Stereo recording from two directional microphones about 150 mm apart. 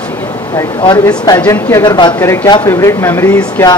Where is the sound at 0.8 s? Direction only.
25° left (ahead or behind).